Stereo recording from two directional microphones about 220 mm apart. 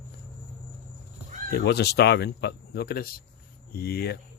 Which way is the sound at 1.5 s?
50° left (ahead or behind).